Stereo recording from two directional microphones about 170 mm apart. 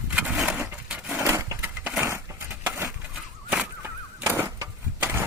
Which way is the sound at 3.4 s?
10° right (ahead or behind).